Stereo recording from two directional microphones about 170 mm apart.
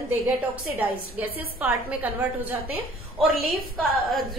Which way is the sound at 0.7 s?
10° right (ahead or behind).